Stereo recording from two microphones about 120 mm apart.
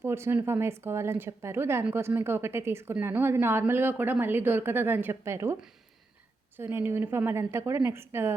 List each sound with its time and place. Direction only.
0.0 s a woman's voice: 20° right (ahead or behind)
6.6 s a woman's voice: 20° right (ahead or behind)